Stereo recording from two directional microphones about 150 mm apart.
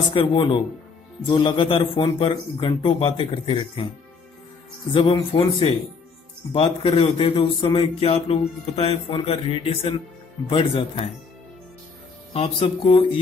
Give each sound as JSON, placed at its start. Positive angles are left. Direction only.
{"t": 0.1, "sound": "a man's voice", "side_deg": 35}
{"t": 4.9, "sound": "a man's voice", "side_deg": 35}
{"t": 12.4, "sound": "a man's voice", "side_deg": 40}